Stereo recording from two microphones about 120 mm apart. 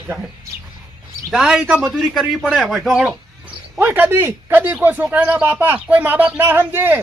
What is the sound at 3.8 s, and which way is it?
Speech, 15° right (ahead or behind).